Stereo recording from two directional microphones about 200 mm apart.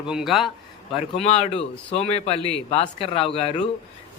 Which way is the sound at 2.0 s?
30° left (ahead or behind).